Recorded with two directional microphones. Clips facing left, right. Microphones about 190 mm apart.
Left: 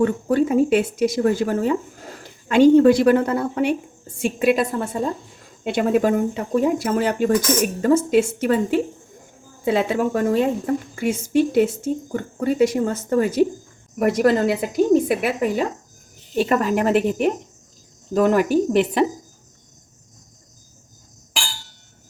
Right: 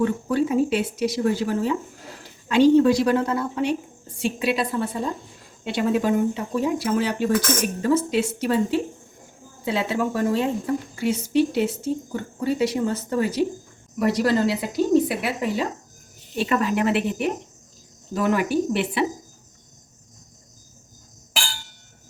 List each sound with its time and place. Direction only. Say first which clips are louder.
0.0 s a woman's voice: left 3 dB; 50° left (ahead or behind)